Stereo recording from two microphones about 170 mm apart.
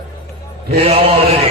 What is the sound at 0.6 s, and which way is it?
Mantra, 35° right (ahead or behind).